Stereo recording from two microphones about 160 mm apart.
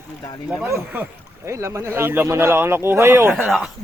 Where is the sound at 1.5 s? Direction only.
15° right (ahead or behind).